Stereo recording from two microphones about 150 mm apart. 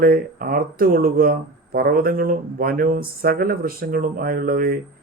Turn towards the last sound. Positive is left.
turn(degrees=-80)